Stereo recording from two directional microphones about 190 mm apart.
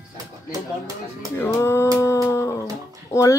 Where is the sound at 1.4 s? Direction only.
15° left (ahead or behind).